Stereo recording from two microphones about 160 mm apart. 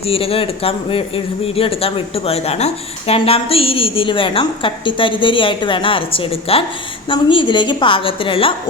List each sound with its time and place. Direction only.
0.0 s speech: 35° left (ahead or behind)